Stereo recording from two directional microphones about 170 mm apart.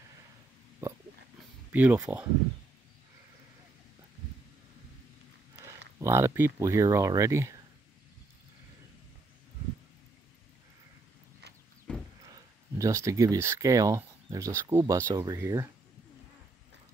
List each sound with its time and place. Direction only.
0.8 s oink: 15° right (ahead or behind)
1.7 s speech: 10° right (ahead or behind)
5.9 s speech: 15° right (ahead or behind)
11.9 s a sound: 5° left (ahead or behind)
12.3 s speech: 20° right (ahead or behind)